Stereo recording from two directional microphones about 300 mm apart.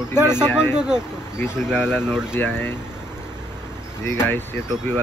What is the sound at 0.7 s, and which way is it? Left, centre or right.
Speech, centre.